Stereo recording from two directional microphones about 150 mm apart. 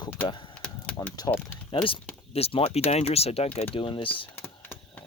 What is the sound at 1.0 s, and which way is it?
Speech, 15° left (ahead or behind).